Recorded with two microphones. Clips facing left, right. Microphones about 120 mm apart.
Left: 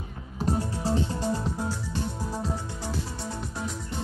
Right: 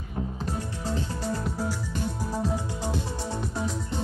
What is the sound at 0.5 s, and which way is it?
Music, 35° left (ahead or behind).